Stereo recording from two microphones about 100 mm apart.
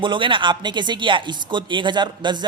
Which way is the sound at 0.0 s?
55° right (ahead or behind).